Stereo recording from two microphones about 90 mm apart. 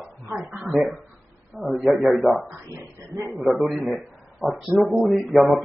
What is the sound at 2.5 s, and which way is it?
Speech, 35° right (ahead or behind).